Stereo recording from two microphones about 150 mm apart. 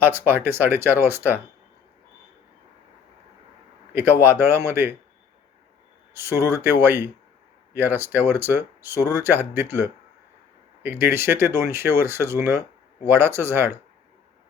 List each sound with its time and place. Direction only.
0.0 s speech: 15° right (ahead or behind)
3.9 s speech: 15° right (ahead or behind)
6.1 s speech: 15° right (ahead or behind)